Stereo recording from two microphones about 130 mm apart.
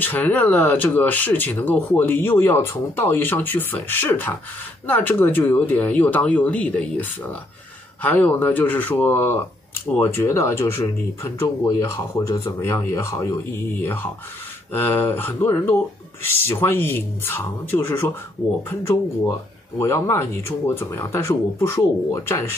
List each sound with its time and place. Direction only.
0.0 s speech: 15° left (ahead or behind)
19.8 s speech: 20° left (ahead or behind)